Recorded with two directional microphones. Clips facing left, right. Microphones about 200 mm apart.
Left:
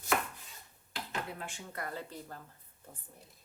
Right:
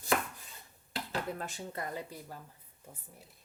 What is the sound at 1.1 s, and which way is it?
Speech, 40° right (ahead or behind).